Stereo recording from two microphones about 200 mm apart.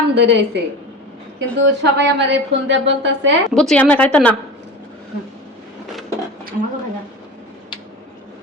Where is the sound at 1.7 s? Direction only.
60° right (ahead or behind).